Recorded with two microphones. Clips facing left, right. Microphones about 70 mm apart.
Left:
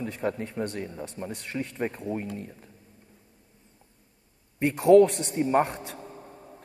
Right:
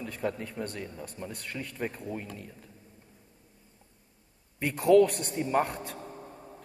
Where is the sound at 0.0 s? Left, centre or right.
Left.